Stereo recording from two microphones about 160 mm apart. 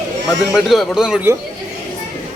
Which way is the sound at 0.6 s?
Centre (ahead or behind).